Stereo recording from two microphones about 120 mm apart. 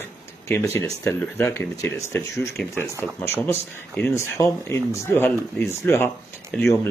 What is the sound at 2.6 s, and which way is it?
Speech, 10° left (ahead or behind).